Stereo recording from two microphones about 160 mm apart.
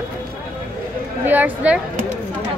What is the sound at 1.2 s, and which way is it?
Speech, 10° right (ahead or behind).